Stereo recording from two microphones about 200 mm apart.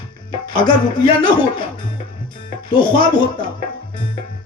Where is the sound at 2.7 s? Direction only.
25° left (ahead or behind).